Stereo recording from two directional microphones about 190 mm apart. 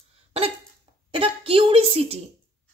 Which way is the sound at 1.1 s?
30° right (ahead or behind).